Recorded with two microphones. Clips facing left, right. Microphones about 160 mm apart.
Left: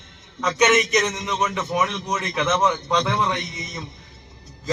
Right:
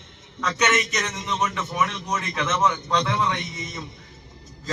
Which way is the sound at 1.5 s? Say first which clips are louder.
Left 3 dB; 15° left (ahead or behind).